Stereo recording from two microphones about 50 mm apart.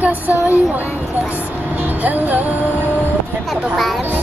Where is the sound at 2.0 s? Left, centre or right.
Right.